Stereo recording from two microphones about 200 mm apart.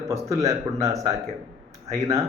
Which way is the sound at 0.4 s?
15° right (ahead or behind).